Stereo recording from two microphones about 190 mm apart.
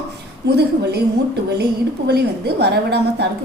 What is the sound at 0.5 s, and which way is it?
Speech, 60° right (ahead or behind).